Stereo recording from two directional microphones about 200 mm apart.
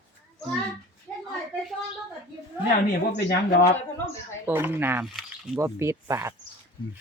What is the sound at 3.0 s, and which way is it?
Speech, 50° left (ahead or behind).